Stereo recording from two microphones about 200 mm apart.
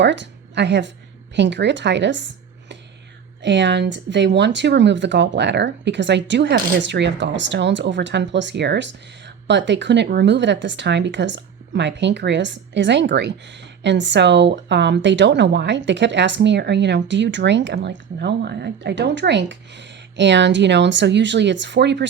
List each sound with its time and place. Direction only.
0.0 s a woman's voice: 60° right (ahead or behind)